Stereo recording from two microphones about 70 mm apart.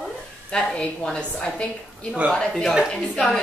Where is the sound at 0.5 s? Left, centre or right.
Centre.